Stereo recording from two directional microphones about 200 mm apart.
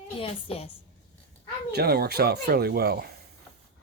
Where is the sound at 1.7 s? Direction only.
50° right (ahead or behind).